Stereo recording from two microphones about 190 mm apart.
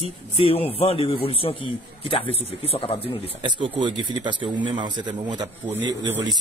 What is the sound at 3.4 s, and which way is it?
Speech, 25° right (ahead or behind).